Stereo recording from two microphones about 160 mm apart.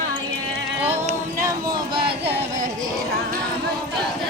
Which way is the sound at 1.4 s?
30° right (ahead or behind).